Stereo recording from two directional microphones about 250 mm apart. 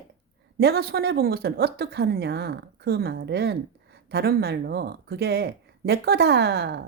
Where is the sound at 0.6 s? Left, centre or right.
Right.